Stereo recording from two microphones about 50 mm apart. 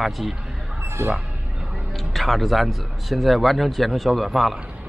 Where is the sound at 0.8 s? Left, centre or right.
Right.